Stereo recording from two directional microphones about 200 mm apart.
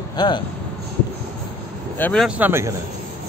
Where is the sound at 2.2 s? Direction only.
5° right (ahead or behind).